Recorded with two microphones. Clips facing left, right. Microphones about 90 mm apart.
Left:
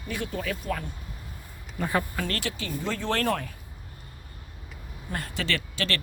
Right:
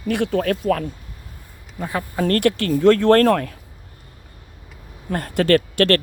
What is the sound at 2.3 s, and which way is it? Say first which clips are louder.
Speech: right 14 dB; 55° right (ahead or behind).